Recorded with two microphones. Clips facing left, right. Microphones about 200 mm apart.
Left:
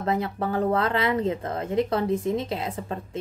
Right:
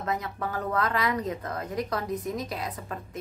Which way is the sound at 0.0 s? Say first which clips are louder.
Left 5 dB; 30° left (ahead or behind).